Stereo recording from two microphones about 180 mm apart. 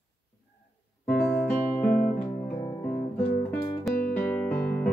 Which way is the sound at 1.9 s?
50° left (ahead or behind).